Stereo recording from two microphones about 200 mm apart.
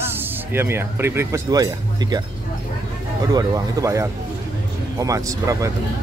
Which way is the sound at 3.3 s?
15° right (ahead or behind).